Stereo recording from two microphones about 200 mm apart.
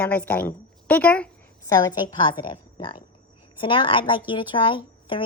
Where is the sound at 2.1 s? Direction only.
25° left (ahead or behind).